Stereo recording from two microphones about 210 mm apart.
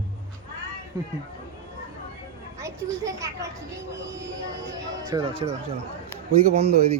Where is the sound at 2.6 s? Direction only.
15° right (ahead or behind).